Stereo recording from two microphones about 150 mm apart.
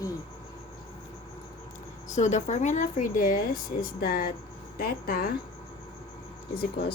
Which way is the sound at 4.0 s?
75° left (ahead or behind).